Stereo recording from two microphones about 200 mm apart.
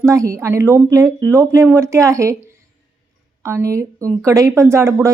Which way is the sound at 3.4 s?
15° right (ahead or behind).